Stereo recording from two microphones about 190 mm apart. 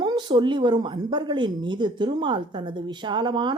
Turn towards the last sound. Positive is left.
turn(degrees=-25)  # may be behind; listen again after turning